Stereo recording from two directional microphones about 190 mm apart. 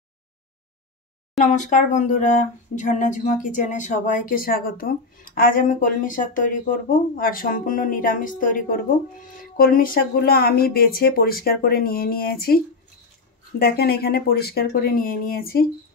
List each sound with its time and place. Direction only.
1.4 s speech: 40° left (ahead or behind)
13.6 s speech: 55° left (ahead or behind)